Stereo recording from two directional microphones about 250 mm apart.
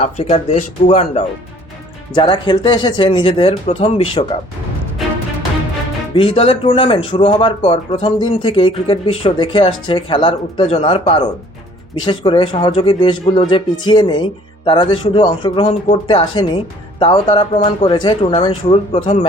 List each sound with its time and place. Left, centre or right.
0.0 s speech: left
6.1 s speech: left